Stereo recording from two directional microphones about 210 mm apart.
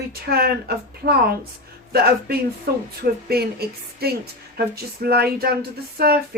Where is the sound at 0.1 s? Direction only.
45° right (ahead or behind).